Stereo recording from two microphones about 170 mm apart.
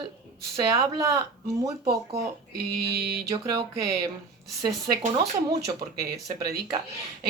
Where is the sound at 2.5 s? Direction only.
75° right (ahead or behind).